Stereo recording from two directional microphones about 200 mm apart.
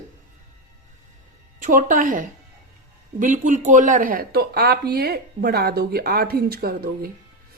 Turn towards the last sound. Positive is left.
turn(degrees=-50)  # may be behind; listen again after turning